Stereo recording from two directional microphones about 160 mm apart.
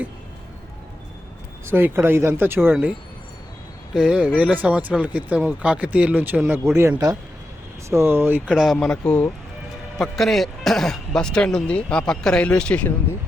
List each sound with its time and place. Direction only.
1.6 s speech: 15° right (ahead or behind)
3.9 s a man's voice: 5° right (ahead or behind)